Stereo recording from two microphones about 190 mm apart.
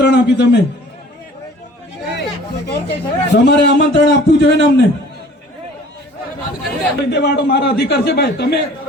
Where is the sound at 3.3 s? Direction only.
60° left (ahead or behind).